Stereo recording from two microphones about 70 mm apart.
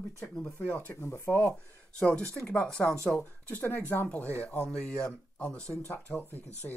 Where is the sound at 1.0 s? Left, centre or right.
Left.